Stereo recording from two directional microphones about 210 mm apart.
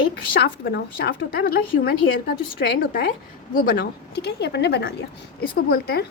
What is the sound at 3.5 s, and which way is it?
A woman's voice, 40° left (ahead or behind).